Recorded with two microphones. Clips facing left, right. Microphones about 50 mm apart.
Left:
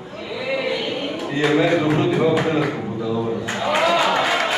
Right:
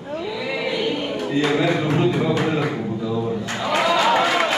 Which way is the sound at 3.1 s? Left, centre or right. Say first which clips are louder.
Left 3 dB; centre.